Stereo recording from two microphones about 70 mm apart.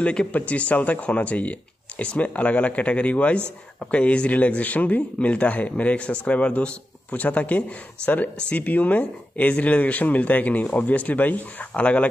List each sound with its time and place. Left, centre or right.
0.0 s speech: centre